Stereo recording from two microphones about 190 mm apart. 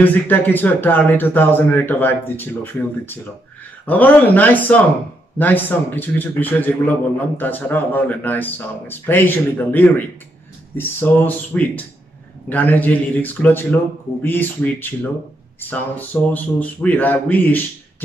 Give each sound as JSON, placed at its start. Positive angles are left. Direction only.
{"t": 0.0, "sound": "a man's voice", "side_deg": 10}